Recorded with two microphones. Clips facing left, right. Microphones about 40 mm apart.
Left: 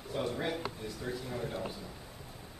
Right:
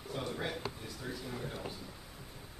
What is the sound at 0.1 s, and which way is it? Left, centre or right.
A man's voice, centre.